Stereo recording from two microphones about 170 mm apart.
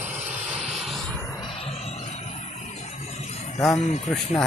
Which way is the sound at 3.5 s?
20° left (ahead or behind).